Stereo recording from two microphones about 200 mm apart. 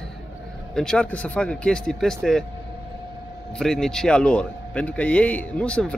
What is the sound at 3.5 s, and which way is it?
A man's voice, centre (ahead or behind).